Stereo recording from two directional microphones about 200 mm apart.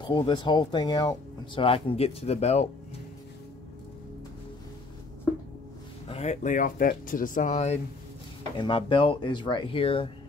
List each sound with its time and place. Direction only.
0.0 s speech: 25° left (ahead or behind)
6.0 s speech: 35° left (ahead or behind)